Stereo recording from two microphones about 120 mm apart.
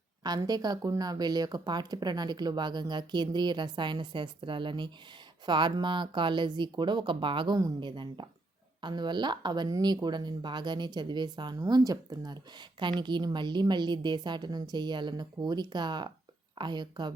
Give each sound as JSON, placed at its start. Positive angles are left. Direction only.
{"t": 0.2, "sound": "speech", "side_deg": -35}